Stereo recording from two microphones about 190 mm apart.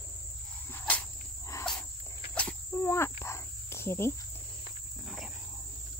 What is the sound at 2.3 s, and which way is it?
Cricket, 5° left (ahead or behind).